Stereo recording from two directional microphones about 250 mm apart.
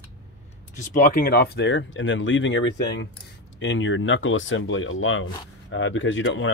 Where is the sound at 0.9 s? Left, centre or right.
Left.